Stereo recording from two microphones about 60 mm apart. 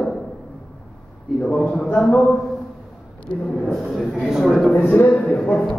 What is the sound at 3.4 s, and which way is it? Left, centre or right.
Speech, centre.